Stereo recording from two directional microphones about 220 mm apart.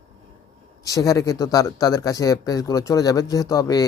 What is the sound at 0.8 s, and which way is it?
Speech, 15° left (ahead or behind).